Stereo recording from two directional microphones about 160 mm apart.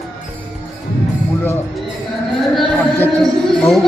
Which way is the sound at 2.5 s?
10° left (ahead or behind).